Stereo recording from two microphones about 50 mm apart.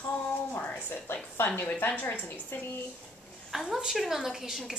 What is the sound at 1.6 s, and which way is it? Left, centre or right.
Speech, left.